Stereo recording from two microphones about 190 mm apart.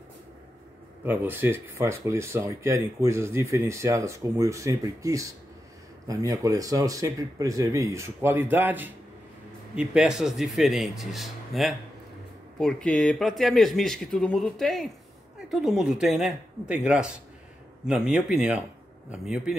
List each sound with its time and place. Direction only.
1.0 s speech: 10° right (ahead or behind)